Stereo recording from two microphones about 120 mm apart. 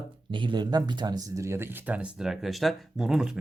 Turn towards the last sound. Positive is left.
turn(degrees=-5)  # may be behind; listen again after turning